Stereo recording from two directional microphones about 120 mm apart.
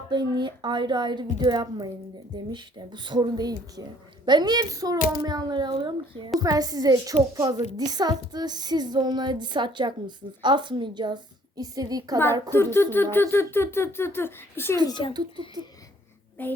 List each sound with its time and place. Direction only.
0.1 s a woman's voice: 40° right (ahead or behind)
6.4 s a woman's voice: 30° right (ahead or behind)
12.5 s speech: 20° left (ahead or behind)
14.8 s speech: 40° left (ahead or behind)
15.1 s a woman's voice: 35° right (ahead or behind)
16.4 s a child's voice: 15° left (ahead or behind)